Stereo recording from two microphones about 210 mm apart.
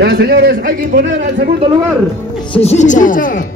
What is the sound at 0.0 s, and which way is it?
Speech, 45° right (ahead or behind).